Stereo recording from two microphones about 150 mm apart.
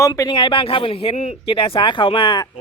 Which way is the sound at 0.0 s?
25° left (ahead or behind).